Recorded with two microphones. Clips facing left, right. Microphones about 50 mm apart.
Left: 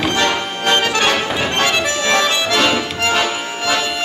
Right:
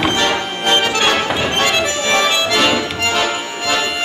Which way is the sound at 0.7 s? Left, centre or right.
Right.